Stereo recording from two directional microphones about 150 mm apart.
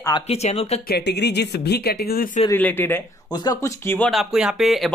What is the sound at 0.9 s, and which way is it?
Speech, 90° left.